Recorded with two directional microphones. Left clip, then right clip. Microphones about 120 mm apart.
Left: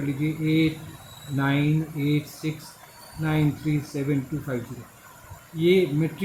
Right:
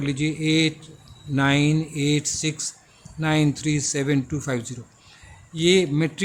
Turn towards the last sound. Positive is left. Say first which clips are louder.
# right 2 dB
turn(degrees=-55)  # may be behind; listen again after turning